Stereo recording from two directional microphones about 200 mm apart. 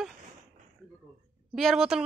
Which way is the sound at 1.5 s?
Centre (ahead or behind).